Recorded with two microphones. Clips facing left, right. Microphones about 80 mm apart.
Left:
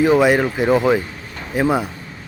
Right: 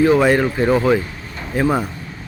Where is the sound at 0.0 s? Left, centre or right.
Centre.